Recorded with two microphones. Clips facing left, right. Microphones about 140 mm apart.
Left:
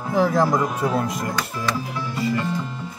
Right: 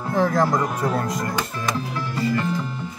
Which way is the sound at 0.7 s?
15° left (ahead or behind).